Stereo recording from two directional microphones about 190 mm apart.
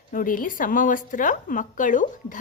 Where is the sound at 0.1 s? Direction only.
45° left (ahead or behind).